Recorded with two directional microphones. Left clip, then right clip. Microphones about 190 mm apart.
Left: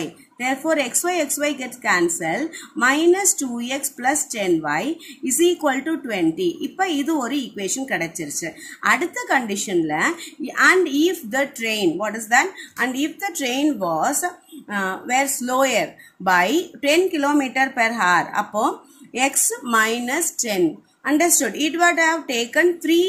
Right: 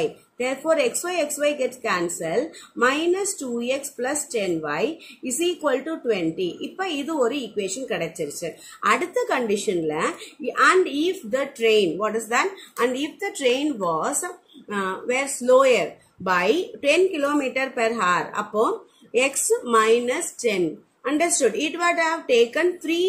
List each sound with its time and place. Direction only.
0.4 s a woman's voice: 25° left (ahead or behind)